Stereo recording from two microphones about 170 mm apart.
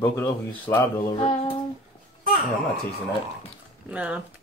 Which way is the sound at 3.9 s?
5° right (ahead or behind).